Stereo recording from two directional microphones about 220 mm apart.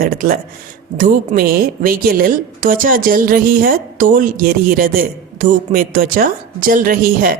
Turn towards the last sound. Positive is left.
turn(degrees=-40)  # may be behind; listen again after turning